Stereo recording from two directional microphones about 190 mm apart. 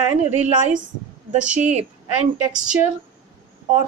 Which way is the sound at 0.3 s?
35° right (ahead or behind).